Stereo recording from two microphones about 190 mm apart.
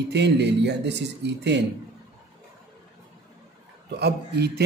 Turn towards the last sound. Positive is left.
turn(degrees=-60)  # may be behind; listen again after turning